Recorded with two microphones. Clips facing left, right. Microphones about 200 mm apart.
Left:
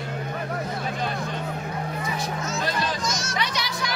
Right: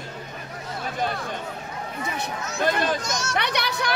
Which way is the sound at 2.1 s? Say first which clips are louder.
Left 1 dB; 55° right (ahead or behind).